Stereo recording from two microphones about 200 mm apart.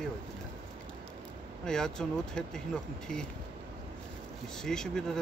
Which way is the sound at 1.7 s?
5° left (ahead or behind).